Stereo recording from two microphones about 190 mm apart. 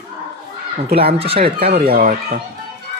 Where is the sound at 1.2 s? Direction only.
30° right (ahead or behind).